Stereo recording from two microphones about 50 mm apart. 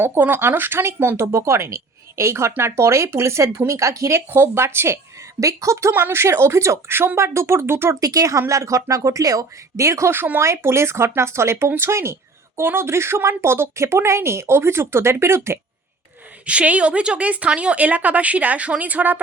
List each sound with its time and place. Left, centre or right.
0.0 s speech: right
3.7 s a woman's voice: right
4.3 s speech: right
5.4 s speech: right
5.9 s speech: right
7.9 s speech: right
10.4 s speech: right
12.6 s speech: right
16.5 s a woman's voice: right